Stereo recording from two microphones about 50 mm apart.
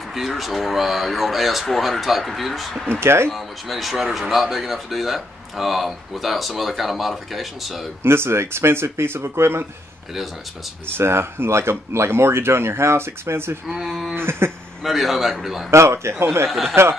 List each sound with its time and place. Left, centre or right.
0.1 s speech: centre
2.9 s speech: right
3.3 s speech: centre
8.0 s speech: right
10.9 s speech: right
13.7 s speech: centre
14.1 s a sound: right
14.8 s speech: centre
15.7 s speech: right
16.4 s speech: centre